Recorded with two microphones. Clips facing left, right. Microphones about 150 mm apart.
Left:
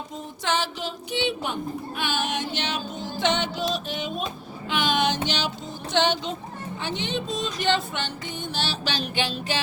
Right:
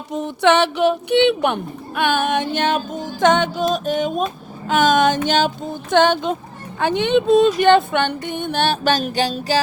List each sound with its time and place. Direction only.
0.1 s speech: 70° right (ahead or behind); by 9.6 s 40° right (ahead or behind)